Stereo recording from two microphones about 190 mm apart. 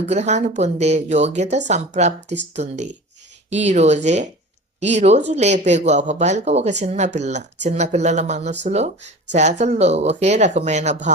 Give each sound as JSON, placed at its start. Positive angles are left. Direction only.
{"t": 0.0, "sound": "speech", "side_deg": -35}